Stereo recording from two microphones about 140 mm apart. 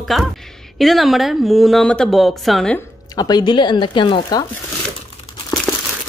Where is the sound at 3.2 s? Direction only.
30° left (ahead or behind).